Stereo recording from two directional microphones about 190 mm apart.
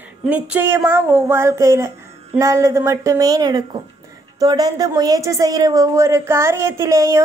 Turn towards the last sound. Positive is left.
turn(degrees=-15)  # may be behind; listen again after turning